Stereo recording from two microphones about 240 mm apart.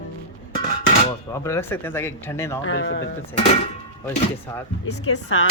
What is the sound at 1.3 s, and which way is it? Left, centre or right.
Speech, centre.